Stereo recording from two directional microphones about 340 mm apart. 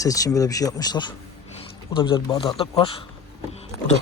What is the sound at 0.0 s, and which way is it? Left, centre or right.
Speech, centre.